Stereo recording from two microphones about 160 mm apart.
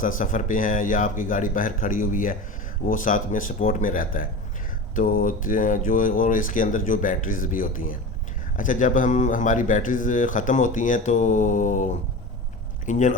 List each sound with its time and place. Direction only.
0.0 s speech: 55° left (ahead or behind)